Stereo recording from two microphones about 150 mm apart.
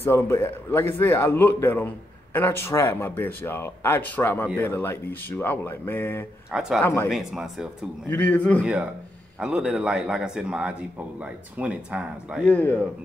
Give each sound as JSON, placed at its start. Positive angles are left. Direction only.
{"t": 0.0, "sound": "speech", "side_deg": 15}
{"t": 7.1, "sound": "speech", "side_deg": 0}
{"t": 8.1, "sound": "speech", "side_deg": 10}
{"t": 8.6, "sound": "a man's voice", "side_deg": -5}
{"t": 12.4, "sound": "speech", "side_deg": 10}